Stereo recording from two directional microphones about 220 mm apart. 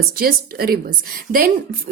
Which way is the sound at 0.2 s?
40° right (ahead or behind).